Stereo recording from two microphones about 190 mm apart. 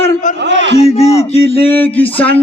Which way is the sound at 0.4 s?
70° right (ahead or behind).